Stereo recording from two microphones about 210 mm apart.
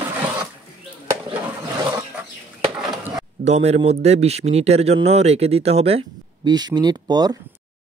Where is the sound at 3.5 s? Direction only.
30° right (ahead or behind).